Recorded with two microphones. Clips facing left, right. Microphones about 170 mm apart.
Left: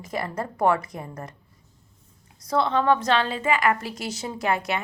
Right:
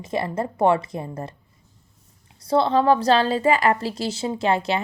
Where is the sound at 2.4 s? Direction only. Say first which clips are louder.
Right 4 dB; 30° right (ahead or behind).